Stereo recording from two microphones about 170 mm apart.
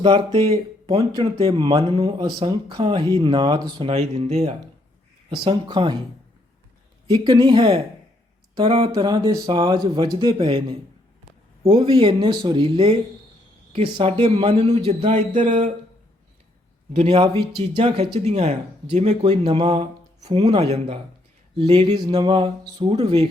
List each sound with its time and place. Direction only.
0.0 s speech: 30° right (ahead or behind)
3.9 s speech: 40° right (ahead or behind)
7.1 s speech: 30° right (ahead or behind); by 15.7 s 45° right (ahead or behind)
16.9 s speech: 35° right (ahead or behind)